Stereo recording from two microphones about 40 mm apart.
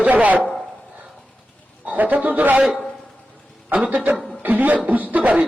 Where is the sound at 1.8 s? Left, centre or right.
Right.